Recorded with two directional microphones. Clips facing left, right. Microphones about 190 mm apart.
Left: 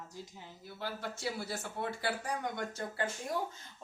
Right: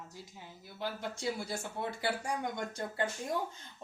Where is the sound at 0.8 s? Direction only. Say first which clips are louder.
Right 1 dB; 15° right (ahead or behind).